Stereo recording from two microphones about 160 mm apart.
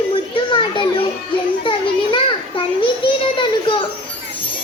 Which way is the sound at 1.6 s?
30° left (ahead or behind).